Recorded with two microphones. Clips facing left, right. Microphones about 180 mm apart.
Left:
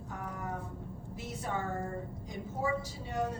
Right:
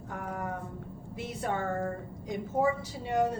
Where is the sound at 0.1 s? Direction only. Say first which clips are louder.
Right 4 dB; 65° right (ahead or behind).